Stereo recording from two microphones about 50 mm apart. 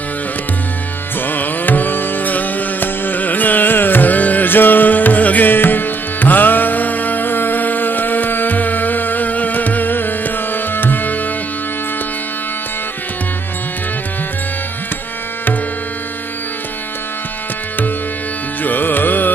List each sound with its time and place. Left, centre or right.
1.2 s music: left
18.6 s carnatic music: left